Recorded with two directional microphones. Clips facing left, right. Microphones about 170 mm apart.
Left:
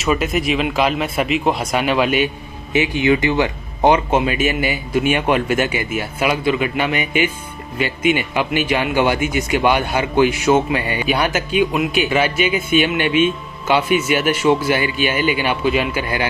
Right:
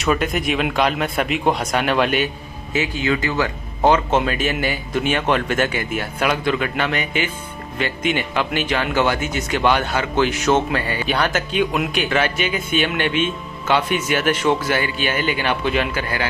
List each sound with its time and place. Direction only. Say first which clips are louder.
0.0 s speech: left 1 dB; 5° left (ahead or behind)
2.7 s speech: left 5 dB; 20° left (ahead or behind)